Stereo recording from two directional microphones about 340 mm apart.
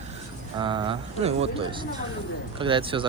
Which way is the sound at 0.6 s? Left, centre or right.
Centre.